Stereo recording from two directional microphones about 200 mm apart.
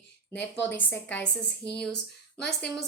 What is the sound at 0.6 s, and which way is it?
Speech, 10° left (ahead or behind).